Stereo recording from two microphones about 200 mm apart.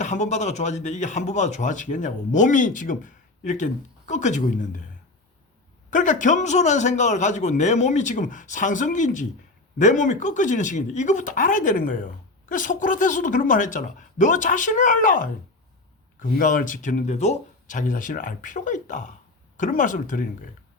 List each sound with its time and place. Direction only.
0.0 s speech: 35° left (ahead or behind)
5.9 s speech: 40° left (ahead or behind)